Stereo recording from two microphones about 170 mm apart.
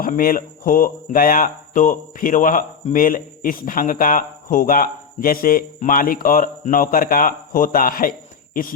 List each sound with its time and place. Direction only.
0.0 s speech: 55° left (ahead or behind)